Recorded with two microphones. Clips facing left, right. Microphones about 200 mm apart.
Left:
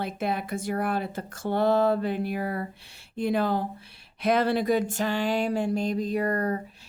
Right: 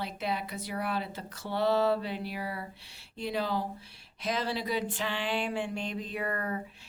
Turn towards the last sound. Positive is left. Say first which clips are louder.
# left 8 dB
turn(degrees=40)  # may be behind; listen again after turning